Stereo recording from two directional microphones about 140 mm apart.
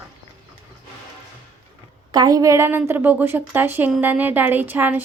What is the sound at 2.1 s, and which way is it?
A woman's voice, 30° right (ahead or behind).